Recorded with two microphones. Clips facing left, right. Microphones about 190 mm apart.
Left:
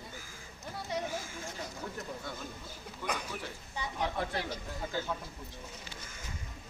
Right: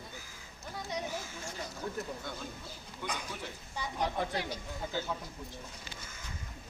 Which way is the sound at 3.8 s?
10° right (ahead or behind).